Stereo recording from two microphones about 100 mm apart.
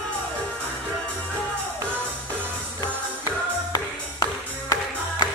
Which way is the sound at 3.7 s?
40° left (ahead or behind).